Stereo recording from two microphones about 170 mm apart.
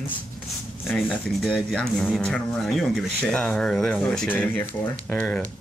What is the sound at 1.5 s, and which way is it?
Speech, centre (ahead or behind).